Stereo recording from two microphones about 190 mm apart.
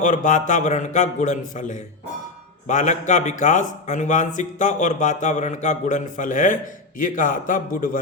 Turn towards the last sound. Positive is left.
turn(degrees=45)  # may be behind; listen again after turning